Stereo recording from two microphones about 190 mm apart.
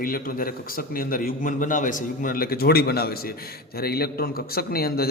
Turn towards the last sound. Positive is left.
turn(degrees=55)  # may be behind; listen again after turning